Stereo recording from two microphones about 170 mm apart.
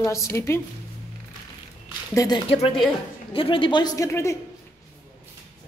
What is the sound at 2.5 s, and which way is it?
Speech, 35° left (ahead or behind).